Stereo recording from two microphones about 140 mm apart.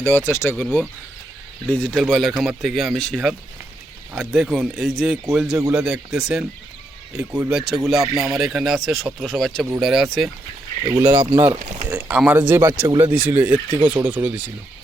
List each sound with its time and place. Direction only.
0.0 s speech: 15° left (ahead or behind)
0.6 s speech: 5° right (ahead or behind)
7.5 s speech: centre (ahead or behind)
10.8 s speech: 30° right (ahead or behind)
11.4 s speech: 15° right (ahead or behind)